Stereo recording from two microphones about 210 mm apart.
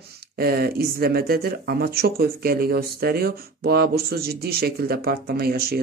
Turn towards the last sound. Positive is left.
turn(degrees=-45)  # may be behind; listen again after turning